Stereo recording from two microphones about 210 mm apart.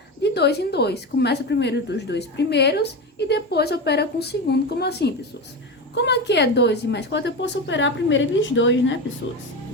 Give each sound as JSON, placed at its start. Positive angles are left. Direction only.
{"t": 0.2, "sound": "a woman's voice", "side_deg": 50}